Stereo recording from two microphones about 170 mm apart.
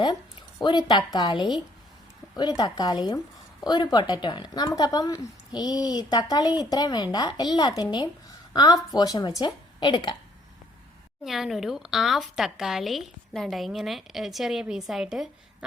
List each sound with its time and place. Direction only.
0.6 s a woman's voice: 25° left (ahead or behind)
11.2 s a woman's voice: centre (ahead or behind)